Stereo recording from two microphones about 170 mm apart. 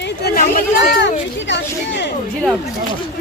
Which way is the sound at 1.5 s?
90° left.